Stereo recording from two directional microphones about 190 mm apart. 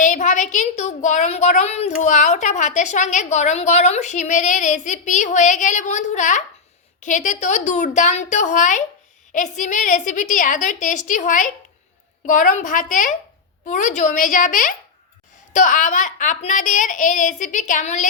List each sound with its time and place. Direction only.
0.0 s a woman's voice: 40° left (ahead or behind)